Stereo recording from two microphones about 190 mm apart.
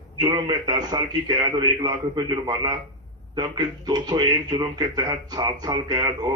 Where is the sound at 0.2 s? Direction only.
20° right (ahead or behind).